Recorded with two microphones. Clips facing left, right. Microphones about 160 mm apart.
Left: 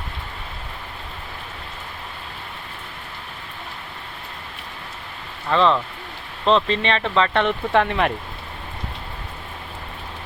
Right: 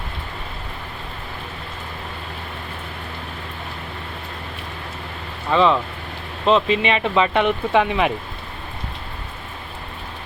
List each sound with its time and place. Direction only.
5.5 s speech: 5° right (ahead or behind)